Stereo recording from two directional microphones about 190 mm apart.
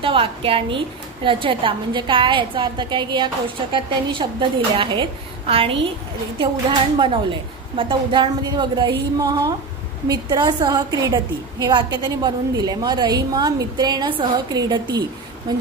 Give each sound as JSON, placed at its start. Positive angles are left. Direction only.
{"t": 0.0, "sound": "a woman's voice", "side_deg": -30}